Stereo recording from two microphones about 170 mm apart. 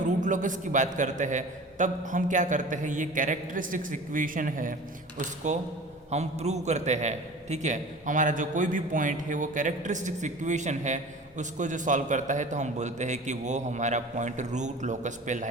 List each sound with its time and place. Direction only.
0.0 s a man's voice: 50° right (ahead or behind)